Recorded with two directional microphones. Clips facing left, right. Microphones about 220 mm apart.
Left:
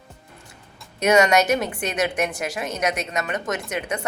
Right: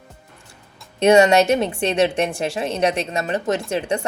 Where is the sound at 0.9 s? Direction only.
30° right (ahead or behind).